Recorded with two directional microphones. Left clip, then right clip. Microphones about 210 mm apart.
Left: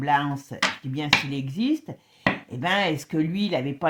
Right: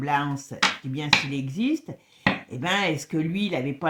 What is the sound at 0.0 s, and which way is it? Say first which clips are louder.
Speech: left 2 dB; 35° left (ahead or behind).